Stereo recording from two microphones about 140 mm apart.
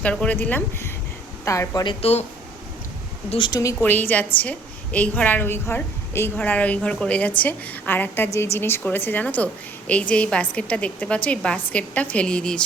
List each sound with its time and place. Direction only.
0.0 s a woman's voice: 10° left (ahead or behind)
1.5 s a woman's voice: 25° left (ahead or behind)
2.0 s speech: 50° left (ahead or behind)
3.2 s speech: 35° left (ahead or behind)
3.8 s a woman's voice: 15° left (ahead or behind)